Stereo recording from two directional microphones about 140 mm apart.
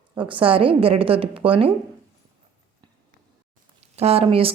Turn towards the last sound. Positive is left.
turn(degrees=-40)  # may be behind; listen again after turning